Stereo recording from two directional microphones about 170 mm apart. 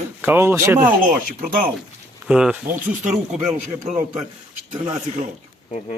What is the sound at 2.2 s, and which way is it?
Speech, 5° right (ahead or behind).